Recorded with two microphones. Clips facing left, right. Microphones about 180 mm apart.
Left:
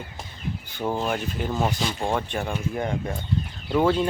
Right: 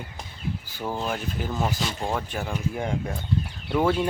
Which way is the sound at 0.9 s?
5° left (ahead or behind).